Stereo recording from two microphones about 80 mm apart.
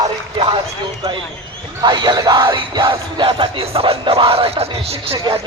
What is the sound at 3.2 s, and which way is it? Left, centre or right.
Speech, right.